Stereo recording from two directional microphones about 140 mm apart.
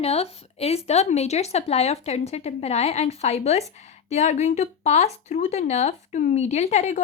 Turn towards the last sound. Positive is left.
turn(degrees=55)  # may be behind; listen again after turning